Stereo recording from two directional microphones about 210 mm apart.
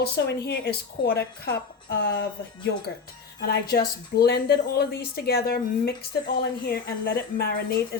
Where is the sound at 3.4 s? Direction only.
50° left (ahead or behind).